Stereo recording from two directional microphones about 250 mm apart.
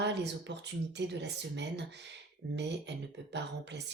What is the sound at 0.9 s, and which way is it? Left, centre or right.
Speech, right.